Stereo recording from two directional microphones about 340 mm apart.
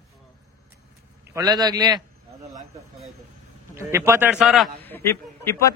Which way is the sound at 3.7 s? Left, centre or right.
Centre.